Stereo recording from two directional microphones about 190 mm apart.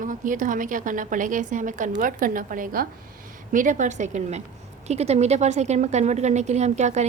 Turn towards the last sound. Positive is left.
turn(degrees=-35)  # may be behind; listen again after turning